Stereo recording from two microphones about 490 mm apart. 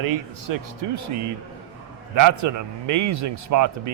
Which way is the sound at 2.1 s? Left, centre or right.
Right.